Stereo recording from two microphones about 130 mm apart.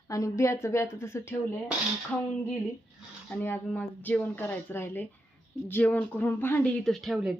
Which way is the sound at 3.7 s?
10° left (ahead or behind).